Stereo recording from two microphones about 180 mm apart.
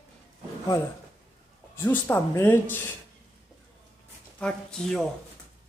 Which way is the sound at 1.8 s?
10° left (ahead or behind).